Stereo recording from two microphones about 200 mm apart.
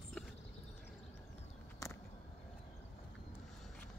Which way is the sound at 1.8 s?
15° left (ahead or behind).